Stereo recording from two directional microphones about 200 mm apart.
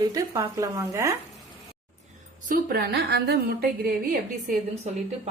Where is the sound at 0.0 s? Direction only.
15° right (ahead or behind).